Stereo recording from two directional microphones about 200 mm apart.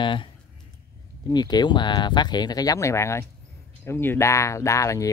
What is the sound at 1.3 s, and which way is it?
Speech, 20° left (ahead or behind).